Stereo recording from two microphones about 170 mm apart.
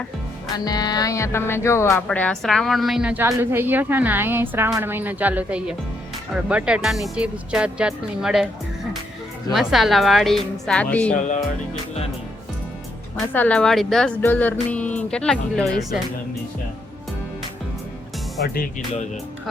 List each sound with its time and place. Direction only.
0.5 s speech: 25° left (ahead or behind)
2.0 s a woman's voice: 5° left (ahead or behind)
9.5 s speech: centre (ahead or behind)
13.1 s speech: 5° left (ahead or behind)
18.4 s speech: 60° left (ahead or behind)